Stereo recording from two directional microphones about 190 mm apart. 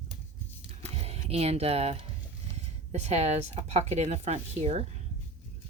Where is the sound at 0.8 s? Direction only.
35° right (ahead or behind).